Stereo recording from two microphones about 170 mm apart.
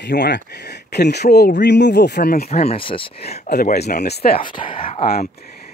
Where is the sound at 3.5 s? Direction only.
70° left (ahead or behind).